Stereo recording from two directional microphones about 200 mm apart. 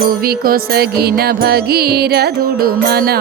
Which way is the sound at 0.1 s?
45° right (ahead or behind).